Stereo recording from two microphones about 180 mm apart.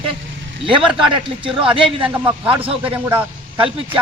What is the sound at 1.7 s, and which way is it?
Speech, 30° right (ahead or behind).